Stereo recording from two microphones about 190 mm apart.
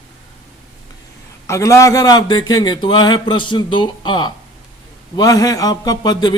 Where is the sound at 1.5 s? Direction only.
15° left (ahead or behind).